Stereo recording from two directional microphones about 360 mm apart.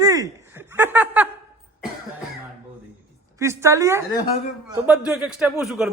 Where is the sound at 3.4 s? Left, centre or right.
Centre.